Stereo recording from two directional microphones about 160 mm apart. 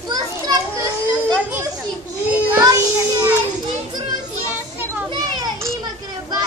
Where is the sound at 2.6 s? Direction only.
20° right (ahead or behind).